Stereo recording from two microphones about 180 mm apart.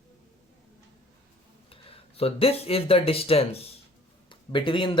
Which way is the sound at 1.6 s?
30° left (ahead or behind).